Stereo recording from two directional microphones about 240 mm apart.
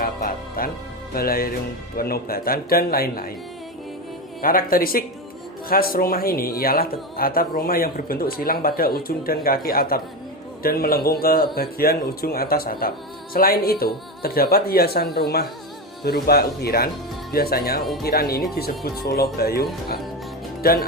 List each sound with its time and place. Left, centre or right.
0.0 s music: left
1.1 s speech: left
4.4 s speech: left
20.6 s speech: left